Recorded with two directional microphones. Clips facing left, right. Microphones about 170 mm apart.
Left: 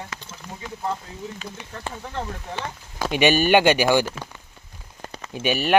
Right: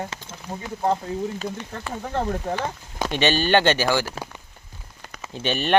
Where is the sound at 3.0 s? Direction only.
10° left (ahead or behind).